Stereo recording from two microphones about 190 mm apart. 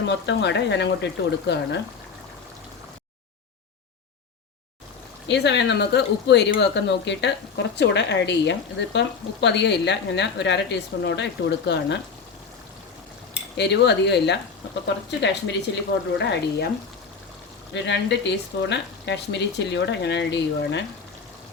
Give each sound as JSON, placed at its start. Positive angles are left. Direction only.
{"t": 0.0, "sound": "speech", "side_deg": 65}
{"t": 5.3, "sound": "speech", "side_deg": 65}
{"t": 13.6, "sound": "a woman's voice", "side_deg": 65}
{"t": 17.8, "sound": "speech", "side_deg": 65}